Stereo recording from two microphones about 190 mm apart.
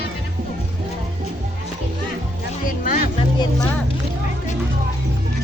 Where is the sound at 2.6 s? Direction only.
45° left (ahead or behind).